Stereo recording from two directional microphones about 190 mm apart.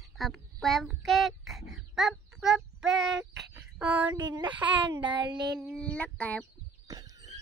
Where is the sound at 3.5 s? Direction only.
10° right (ahead or behind).